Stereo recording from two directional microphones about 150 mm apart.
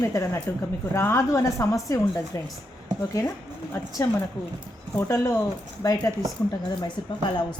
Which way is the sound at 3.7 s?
20° left (ahead or behind).